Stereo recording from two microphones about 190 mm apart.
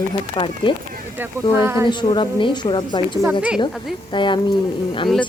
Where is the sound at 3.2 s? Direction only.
10° right (ahead or behind).